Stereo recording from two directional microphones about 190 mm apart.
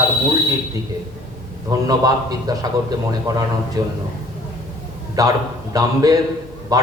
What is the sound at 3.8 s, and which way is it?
Speech, 20° right (ahead or behind).